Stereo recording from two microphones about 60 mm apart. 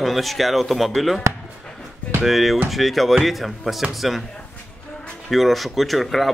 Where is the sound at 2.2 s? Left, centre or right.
Centre.